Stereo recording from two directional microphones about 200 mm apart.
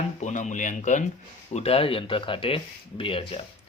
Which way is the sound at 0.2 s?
35° left (ahead or behind).